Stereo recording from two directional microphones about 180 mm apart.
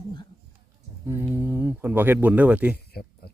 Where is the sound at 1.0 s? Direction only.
10° right (ahead or behind).